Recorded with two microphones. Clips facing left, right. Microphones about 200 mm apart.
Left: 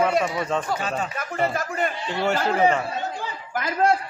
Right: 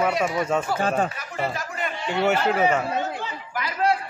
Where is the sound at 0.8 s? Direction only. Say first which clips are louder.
Right 5 dB; 55° right (ahead or behind).